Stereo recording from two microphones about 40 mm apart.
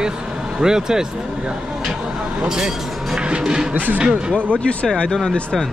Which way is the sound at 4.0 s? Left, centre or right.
Right.